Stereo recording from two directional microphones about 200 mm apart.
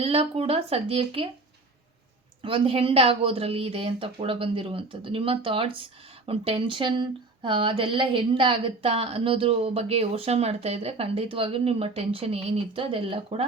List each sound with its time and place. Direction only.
0.0 s speech: 30° right (ahead or behind)
2.4 s speech: 25° right (ahead or behind)